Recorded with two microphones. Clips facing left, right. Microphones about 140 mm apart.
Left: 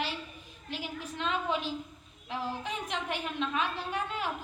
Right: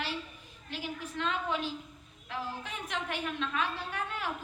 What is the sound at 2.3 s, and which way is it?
A woman's voice, 20° left (ahead or behind).